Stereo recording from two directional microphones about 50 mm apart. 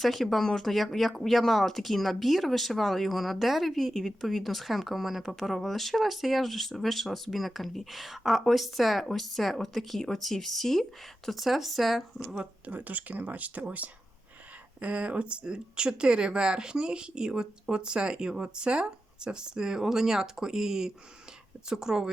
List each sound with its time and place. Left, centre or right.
0.0 s speech: centre
12.6 s speech: right; by 22.1 s centre